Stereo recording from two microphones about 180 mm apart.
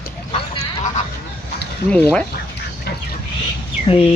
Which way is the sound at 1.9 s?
10° left (ahead or behind).